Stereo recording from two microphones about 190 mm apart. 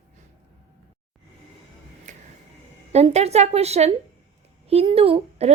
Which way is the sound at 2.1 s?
40° right (ahead or behind).